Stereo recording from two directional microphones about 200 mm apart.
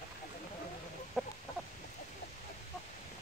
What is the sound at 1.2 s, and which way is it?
Chicken, centre (ahead or behind).